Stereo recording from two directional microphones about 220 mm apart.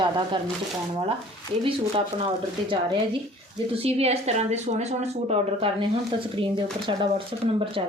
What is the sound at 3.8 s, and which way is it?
Speech, 30° right (ahead or behind).